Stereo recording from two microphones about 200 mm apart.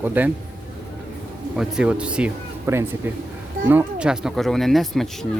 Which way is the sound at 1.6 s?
5° right (ahead or behind).